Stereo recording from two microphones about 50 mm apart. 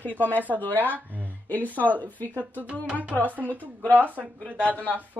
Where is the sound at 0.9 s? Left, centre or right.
Right.